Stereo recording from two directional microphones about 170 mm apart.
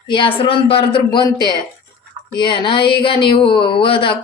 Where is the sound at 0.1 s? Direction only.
30° left (ahead or behind).